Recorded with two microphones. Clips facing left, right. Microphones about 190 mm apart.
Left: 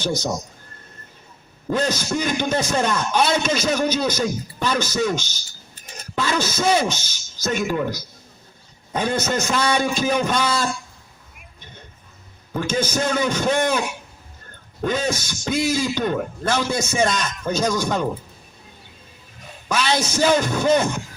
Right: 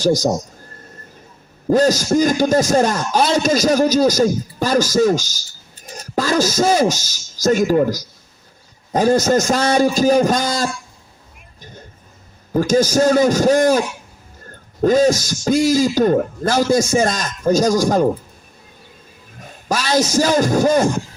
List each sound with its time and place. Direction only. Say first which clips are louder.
1.7 s speech: right 8 dB; 40° right (ahead or behind)
6.1 s speech: right 6 dB; 40° right (ahead or behind)
12.5 s speech: right 8 dB; 35° right (ahead or behind)
19.6 s speech: right 4 dB; 40° right (ahead or behind)